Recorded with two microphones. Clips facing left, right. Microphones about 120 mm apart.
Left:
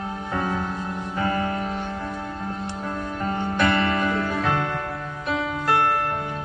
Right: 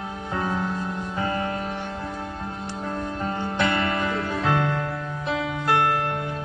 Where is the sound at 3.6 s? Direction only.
25° right (ahead or behind).